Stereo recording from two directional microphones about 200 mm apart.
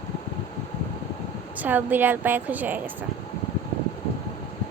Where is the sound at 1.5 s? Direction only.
10° right (ahead or behind).